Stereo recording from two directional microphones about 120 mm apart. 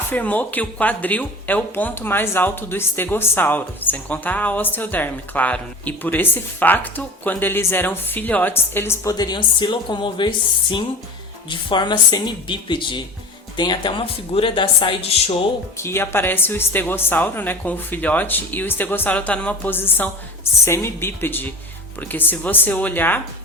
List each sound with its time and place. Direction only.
0.1 s speech: 15° left (ahead or behind)
9.1 s speech: 35° left (ahead or behind)
15.8 s speech: 20° left (ahead or behind)